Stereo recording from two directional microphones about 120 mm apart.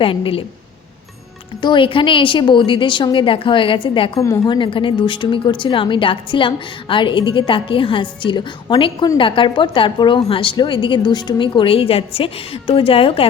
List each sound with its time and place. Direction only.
0.0 s a woman's voice: 50° left (ahead or behind)
1.6 s a woman's voice: 45° left (ahead or behind)